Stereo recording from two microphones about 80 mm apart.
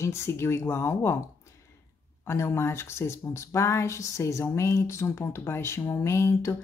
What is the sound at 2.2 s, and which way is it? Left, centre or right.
Speech, left.